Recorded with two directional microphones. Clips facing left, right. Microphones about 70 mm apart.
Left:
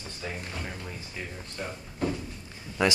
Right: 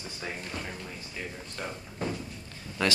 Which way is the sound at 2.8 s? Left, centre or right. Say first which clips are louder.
Left 3 dB; centre.